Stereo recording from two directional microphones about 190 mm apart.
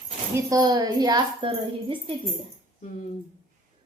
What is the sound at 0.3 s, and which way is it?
A woman's voice, 20° right (ahead or behind).